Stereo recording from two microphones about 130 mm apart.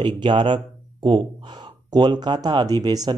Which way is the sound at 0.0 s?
40° right (ahead or behind).